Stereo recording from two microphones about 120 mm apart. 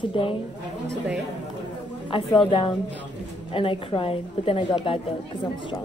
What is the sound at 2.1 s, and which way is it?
A woman's voice, 45° left (ahead or behind).